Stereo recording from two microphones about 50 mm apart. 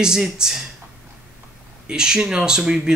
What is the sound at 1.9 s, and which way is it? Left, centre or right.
Speech, centre.